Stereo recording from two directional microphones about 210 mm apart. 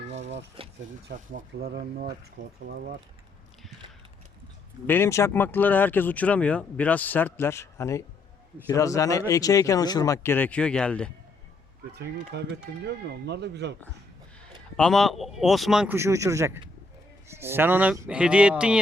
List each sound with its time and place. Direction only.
0.1 s a sound: 30° right (ahead or behind)
1.3 s speech: 50° right (ahead or behind)
4.9 s speech: 10° left (ahead or behind)
11.9 s speech: 50° right (ahead or behind)
14.8 s speech: centre (ahead or behind)